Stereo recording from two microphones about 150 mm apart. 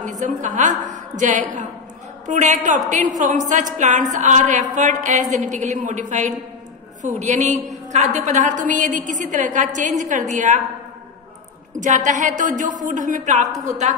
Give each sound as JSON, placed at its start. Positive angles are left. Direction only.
{"t": 0.0, "sound": "a woman's voice", "side_deg": -55}
{"t": 11.8, "sound": "a woman's voice", "side_deg": -55}